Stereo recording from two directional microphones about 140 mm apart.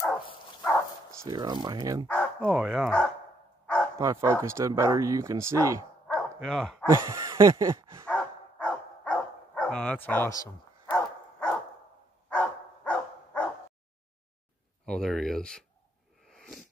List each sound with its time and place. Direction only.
1.2 s speech: 30° right (ahead or behind)
2.0 s bow-wow: 10° left (ahead or behind)
2.5 s speech: 5° right (ahead or behind)
3.6 s bow-wow: 10° left (ahead or behind)
4.0 s speech: 20° right (ahead or behind)
6.1 s dog: 5° left (ahead or behind)
6.9 s speech: 25° right (ahead or behind)
8.1 s dog: 10° left (ahead or behind)
14.9 s speech: 5° left (ahead or behind)
16.3 s sneeze: centre (ahead or behind)